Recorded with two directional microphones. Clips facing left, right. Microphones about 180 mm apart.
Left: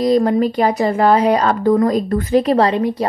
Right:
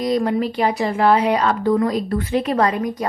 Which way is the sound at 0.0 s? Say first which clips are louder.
Left 5 dB; 35° left (ahead or behind).